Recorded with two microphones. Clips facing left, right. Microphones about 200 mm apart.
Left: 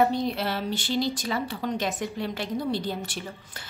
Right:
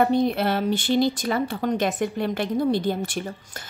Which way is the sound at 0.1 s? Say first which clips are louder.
Right 6 dB; 55° right (ahead or behind).